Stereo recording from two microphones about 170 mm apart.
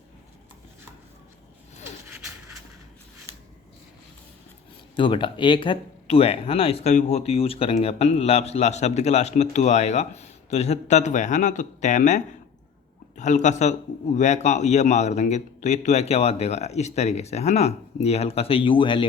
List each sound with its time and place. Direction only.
4.9 s speech: 30° left (ahead or behind)